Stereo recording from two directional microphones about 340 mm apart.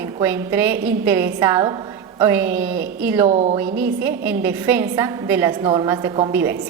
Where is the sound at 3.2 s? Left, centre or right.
Centre.